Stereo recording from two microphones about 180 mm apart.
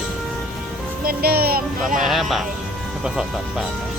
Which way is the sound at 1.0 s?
55° right (ahead or behind).